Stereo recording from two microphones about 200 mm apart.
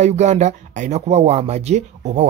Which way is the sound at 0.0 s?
35° right (ahead or behind).